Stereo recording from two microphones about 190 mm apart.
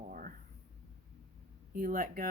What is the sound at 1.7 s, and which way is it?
Speech, 50° right (ahead or behind).